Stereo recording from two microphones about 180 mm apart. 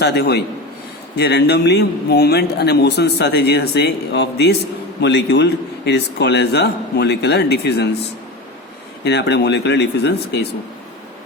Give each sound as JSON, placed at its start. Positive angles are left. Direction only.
{"t": 0.0, "sound": "a man's voice", "side_deg": 65}
{"t": 9.0, "sound": "a man's voice", "side_deg": 70}